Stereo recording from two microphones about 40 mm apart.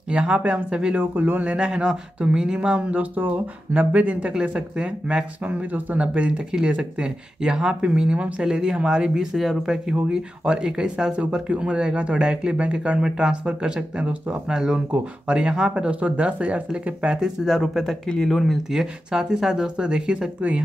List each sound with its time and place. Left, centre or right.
0.1 s speech: right
1.1 s speech: right
1.4 s speech: right
2.8 s speech: right
4.3 s speech: right
5.4 s speech: right
5.9 s speech: right
14.5 s speech: centre
14.9 s speech: right
17.5 s speech: centre
18.0 s speech: centre
18.7 s speech: centre
20.3 s speech: right